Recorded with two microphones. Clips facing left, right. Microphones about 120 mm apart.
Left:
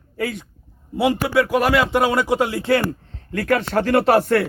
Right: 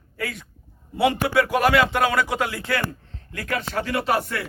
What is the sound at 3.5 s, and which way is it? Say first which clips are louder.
Speech: left 6 dB; 60° left (ahead or behind).